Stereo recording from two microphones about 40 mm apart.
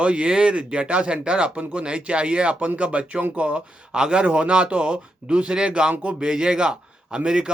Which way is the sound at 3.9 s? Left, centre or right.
Right.